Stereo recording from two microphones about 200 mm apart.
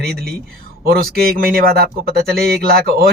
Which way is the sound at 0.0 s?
50° right (ahead or behind).